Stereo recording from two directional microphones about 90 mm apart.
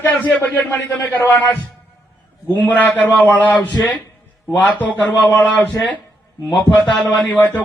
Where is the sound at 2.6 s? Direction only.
20° left (ahead or behind).